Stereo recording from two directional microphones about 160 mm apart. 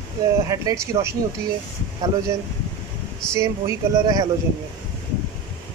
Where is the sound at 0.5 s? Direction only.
20° right (ahead or behind).